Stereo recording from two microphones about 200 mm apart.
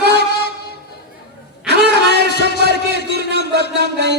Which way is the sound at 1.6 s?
60° right (ahead or behind).